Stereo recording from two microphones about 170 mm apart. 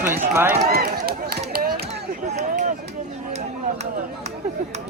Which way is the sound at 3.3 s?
40° right (ahead or behind).